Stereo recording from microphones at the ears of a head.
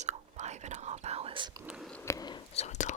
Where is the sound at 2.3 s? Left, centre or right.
Left.